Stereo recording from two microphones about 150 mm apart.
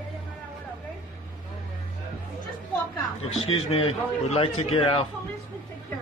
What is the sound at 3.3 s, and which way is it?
A man's voice, 40° left (ahead or behind).